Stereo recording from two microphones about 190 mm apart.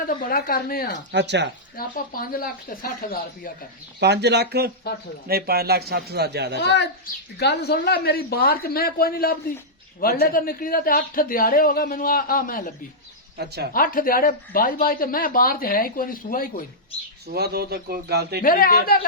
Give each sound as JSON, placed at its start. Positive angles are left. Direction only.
{"t": 0.3, "sound": "speech", "side_deg": 50}
{"t": 1.1, "sound": "a man's voice", "side_deg": -65}
{"t": 1.7, "sound": "speech", "side_deg": 50}
{"t": 4.0, "sound": "a man's voice", "side_deg": -60}
{"t": 6.6, "sound": "speech", "side_deg": 60}
{"t": 13.3, "sound": "a man's voice", "side_deg": -60}
{"t": 13.7, "sound": "speech", "side_deg": 50}
{"t": 17.3, "sound": "a man's voice", "side_deg": -55}
{"t": 18.4, "sound": "speech", "side_deg": 50}